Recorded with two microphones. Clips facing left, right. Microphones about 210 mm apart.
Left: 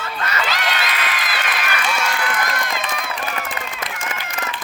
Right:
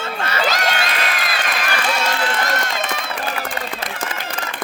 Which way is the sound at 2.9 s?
30° right (ahead or behind).